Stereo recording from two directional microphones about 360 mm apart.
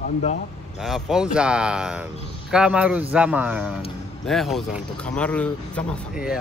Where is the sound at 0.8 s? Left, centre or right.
Centre.